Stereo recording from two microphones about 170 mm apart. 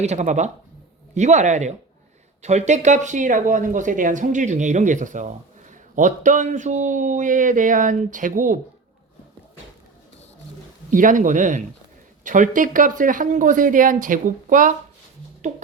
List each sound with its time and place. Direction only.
0.0 s speech: 40° right (ahead or behind)
10.9 s speech: 50° right (ahead or behind)